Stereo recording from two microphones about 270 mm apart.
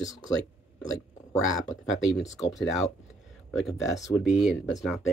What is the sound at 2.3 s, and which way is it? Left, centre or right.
Speech, centre.